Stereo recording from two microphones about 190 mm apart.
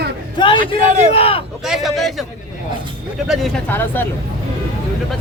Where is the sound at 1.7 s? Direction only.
Centre (ahead or behind).